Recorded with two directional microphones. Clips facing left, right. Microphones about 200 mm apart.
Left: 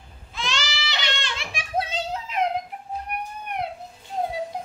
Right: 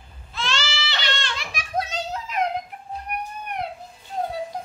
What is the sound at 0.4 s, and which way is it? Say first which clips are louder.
Baby cry: right 2 dB; 15° left (ahead or behind).